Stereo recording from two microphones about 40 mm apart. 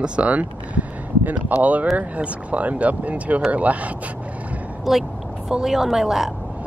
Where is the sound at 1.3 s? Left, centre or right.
Right.